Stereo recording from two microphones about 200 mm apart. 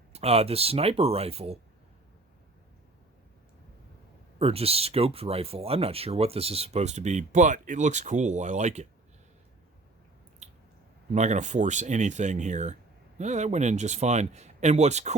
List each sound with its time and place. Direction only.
0.1 s speech: 30° right (ahead or behind)
4.4 s speech: 30° right (ahead or behind)
10.4 s squish: 35° right (ahead or behind)
11.1 s speech: 35° right (ahead or behind)